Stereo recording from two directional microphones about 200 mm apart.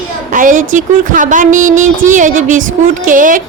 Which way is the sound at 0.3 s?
40° right (ahead or behind).